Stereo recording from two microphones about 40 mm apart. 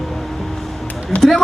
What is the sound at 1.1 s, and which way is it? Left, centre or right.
Speech, left.